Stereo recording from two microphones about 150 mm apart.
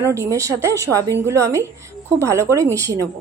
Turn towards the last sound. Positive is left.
turn(degrees=-20)  # may be behind; listen again after turning